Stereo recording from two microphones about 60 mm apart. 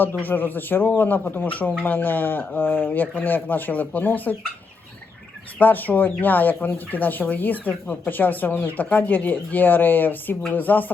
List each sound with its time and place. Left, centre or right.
0.3 s speech: left
5.5 s speech: left